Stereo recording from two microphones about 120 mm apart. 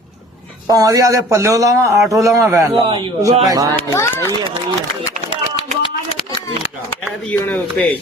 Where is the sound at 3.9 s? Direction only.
25° left (ahead or behind).